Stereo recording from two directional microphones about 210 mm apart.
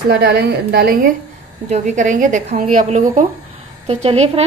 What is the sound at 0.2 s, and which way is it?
Speech, 50° right (ahead or behind).